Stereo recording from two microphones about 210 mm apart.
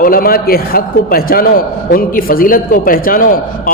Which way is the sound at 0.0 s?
45° left (ahead or behind).